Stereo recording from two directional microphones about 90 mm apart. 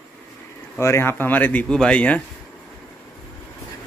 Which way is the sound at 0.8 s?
30° left (ahead or behind).